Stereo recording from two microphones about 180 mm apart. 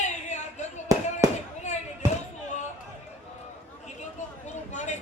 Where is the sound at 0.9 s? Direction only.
20° right (ahead or behind).